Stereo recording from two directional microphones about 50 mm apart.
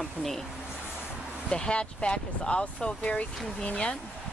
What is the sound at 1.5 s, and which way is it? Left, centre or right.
Speech, centre.